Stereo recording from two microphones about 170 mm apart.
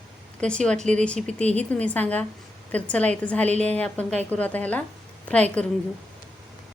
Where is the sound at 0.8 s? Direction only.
45° right (ahead or behind).